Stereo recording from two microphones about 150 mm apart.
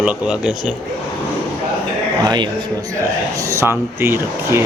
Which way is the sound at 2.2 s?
30° right (ahead or behind).